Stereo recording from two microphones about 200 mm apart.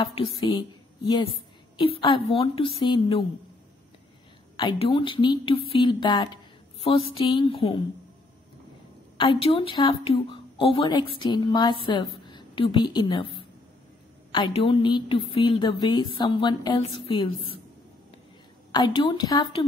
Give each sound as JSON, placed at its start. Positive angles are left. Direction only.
{"t": 0.1, "sound": "a woman's voice", "side_deg": 25}
{"t": 4.6, "sound": "speech", "side_deg": 25}
{"t": 9.2, "sound": "speech", "side_deg": 25}
{"t": 14.3, "sound": "speech", "side_deg": 25}
{"t": 18.7, "sound": "speech", "side_deg": 20}